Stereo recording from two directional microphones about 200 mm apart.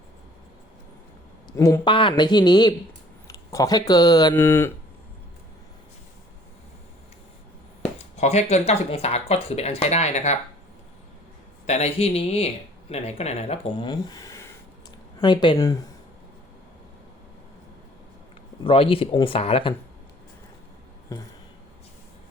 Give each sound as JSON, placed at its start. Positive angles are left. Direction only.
{"t": 1.5, "sound": "speech", "side_deg": 15}
{"t": 8.1, "sound": "speech", "side_deg": 35}
{"t": 11.6, "sound": "speech", "side_deg": 35}
{"t": 18.6, "sound": "speech", "side_deg": 25}
{"t": 21.1, "sound": "a sound", "side_deg": 15}